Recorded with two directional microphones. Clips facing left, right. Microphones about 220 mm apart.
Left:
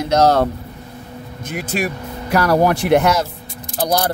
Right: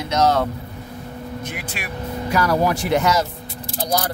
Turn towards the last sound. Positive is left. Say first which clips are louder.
# left 4 dB
turn(degrees=70)  # may be behind; listen again after turning